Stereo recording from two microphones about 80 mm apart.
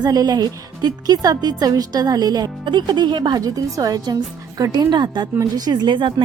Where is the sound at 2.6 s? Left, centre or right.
Right.